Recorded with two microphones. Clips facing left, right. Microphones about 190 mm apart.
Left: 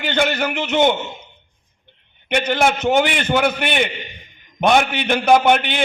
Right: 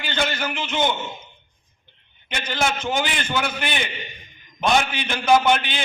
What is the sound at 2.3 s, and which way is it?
A man's voice, 60° left (ahead or behind).